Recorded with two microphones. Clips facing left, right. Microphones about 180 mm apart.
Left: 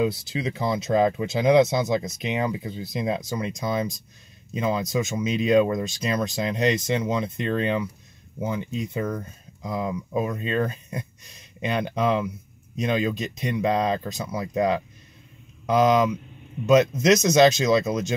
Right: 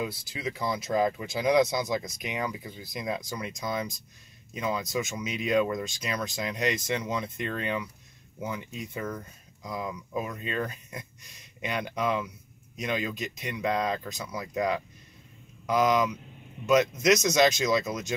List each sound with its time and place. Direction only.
0.0 s speech: 25° left (ahead or behind)